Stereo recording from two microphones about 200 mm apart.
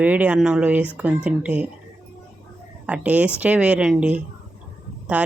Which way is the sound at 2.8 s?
5° right (ahead or behind).